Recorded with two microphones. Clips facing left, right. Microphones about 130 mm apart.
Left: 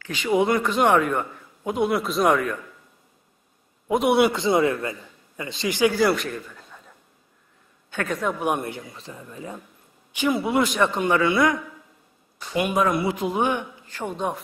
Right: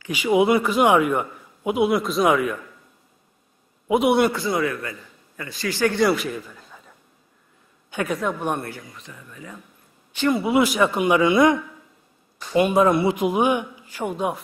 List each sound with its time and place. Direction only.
0.0 s a man's voice: 10° right (ahead or behind)
3.8 s a man's voice: 5° right (ahead or behind)
4.3 s speech: 20° left (ahead or behind)
5.9 s a man's voice: centre (ahead or behind)
8.1 s speech: centre (ahead or behind)
8.4 s speech: 15° left (ahead or behind)
8.9 s speech: 30° left (ahead or behind)
10.1 s speech: 10° left (ahead or behind)
10.4 s a man's voice: 5° right (ahead or behind)
12.5 s a man's voice: 30° right (ahead or behind); by 14.4 s 10° right (ahead or behind)